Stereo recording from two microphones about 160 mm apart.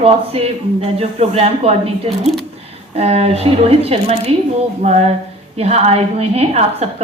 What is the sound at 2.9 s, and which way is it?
Speech, 40° right (ahead or behind).